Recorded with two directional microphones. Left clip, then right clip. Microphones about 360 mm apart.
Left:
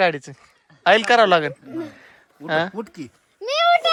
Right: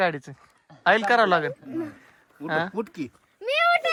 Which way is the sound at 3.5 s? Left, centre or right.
Centre.